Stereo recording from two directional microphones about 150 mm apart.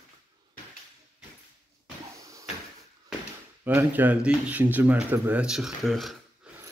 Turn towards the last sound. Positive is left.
turn(degrees=0)  # may be behind; listen again after turning